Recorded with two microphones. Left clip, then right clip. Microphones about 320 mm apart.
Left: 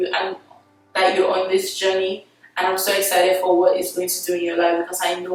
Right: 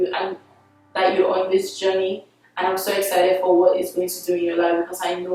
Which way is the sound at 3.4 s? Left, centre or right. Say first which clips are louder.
Even; centre.